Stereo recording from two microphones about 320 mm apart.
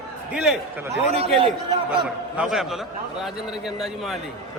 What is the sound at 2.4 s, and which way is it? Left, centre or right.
Speech, centre.